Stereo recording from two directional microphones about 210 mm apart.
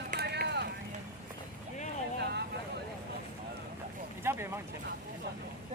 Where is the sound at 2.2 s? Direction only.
50° right (ahead or behind).